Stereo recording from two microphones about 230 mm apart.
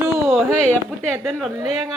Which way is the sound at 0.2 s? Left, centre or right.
Centre.